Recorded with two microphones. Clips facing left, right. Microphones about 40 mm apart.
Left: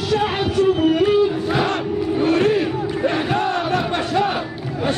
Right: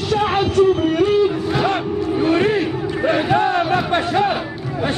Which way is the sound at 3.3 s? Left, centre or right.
Centre.